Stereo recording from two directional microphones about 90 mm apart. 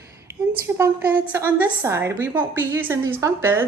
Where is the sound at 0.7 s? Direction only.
20° right (ahead or behind).